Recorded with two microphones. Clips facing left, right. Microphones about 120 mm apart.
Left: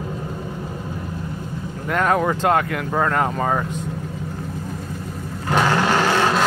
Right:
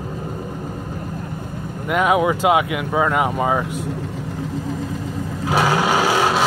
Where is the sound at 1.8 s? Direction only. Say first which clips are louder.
Right 2 dB; 10° right (ahead or behind).